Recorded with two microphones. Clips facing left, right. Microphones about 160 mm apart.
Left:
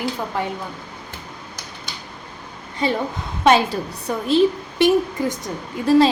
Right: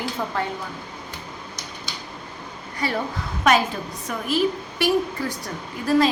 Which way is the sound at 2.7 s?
20° left (ahead or behind).